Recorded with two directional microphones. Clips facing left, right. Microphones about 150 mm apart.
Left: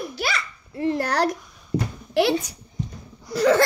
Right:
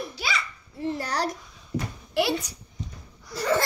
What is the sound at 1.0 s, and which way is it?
Speech, 55° left (ahead or behind).